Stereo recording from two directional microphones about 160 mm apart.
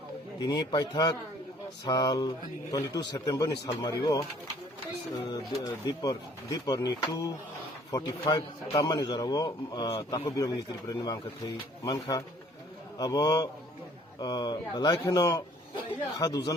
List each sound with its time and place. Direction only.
0.3 s speech: 25° left (ahead or behind)
5.8 s speech: 25° left (ahead or behind)